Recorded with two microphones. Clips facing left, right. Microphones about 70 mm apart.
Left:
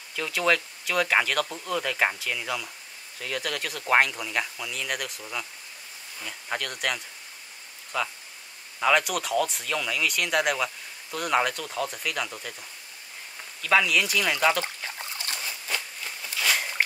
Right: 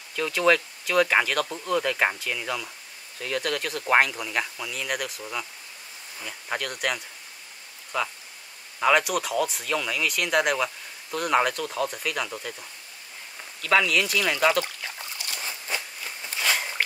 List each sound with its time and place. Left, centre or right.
0.1 s speech: centre
13.6 s speech: centre
15.1 s rodents: left
16.2 s a sound: right